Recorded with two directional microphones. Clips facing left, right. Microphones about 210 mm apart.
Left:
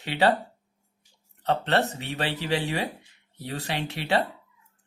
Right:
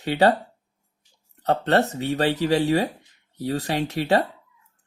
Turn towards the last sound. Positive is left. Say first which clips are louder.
# right 5 dB
turn(degrees=-45)  # may be behind; listen again after turning